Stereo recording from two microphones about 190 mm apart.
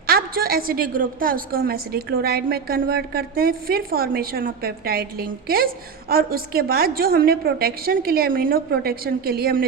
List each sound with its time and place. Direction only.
0.1 s a woman's voice: 50° right (ahead or behind)